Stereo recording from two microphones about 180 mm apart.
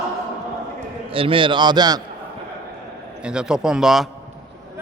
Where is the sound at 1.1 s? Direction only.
30° right (ahead or behind).